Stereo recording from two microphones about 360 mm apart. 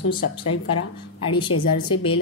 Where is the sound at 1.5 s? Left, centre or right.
Left.